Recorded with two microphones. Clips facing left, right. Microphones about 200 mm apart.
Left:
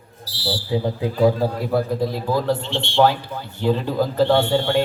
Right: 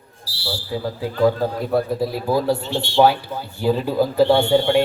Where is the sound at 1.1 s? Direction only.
10° left (ahead or behind).